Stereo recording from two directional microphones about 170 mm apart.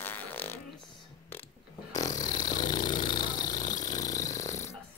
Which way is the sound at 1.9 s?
20° left (ahead or behind).